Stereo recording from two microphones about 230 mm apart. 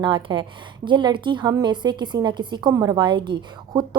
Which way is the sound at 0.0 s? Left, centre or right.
Centre.